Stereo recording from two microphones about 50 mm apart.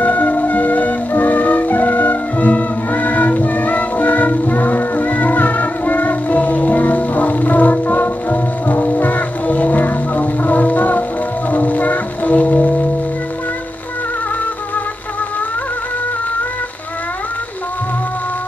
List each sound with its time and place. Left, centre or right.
0.0 s music: left